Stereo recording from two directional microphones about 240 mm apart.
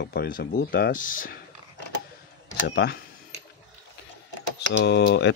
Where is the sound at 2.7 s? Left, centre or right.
Left.